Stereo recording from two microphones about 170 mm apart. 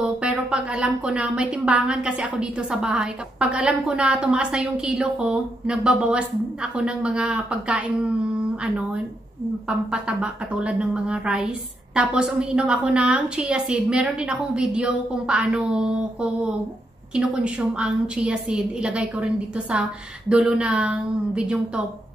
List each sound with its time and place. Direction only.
0.0 s a woman's voice: 5° right (ahead or behind)